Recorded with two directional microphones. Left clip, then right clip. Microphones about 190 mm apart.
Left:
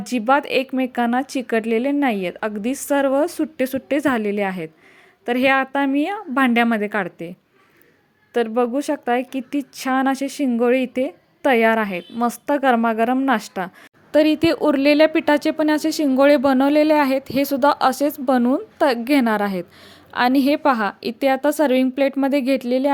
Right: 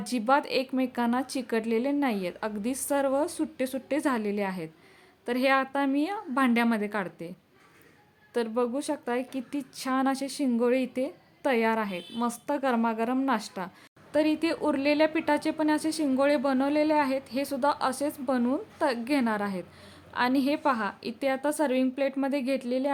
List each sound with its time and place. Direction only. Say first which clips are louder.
0.0 s a woman's voice: left 7 dB; 20° left (ahead or behind)